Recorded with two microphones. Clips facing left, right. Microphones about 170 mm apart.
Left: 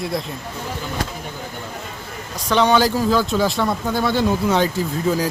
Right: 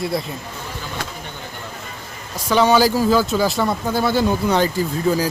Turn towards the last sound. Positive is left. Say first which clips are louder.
# right 1 dB
turn(degrees=0)  # may be behind; listen again after turning